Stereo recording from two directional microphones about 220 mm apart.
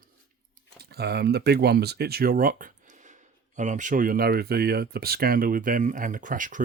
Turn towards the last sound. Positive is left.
turn(degrees=-35)  # may be behind; listen again after turning